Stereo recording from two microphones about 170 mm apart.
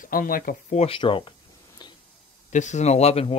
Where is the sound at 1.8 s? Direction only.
25° left (ahead or behind).